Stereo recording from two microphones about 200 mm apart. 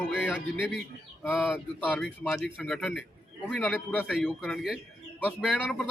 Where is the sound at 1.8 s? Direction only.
5° left (ahead or behind).